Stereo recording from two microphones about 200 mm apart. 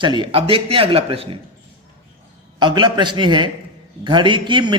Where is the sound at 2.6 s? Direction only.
20° right (ahead or behind).